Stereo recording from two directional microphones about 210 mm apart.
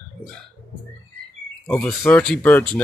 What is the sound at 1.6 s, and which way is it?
Speech, 5° left (ahead or behind).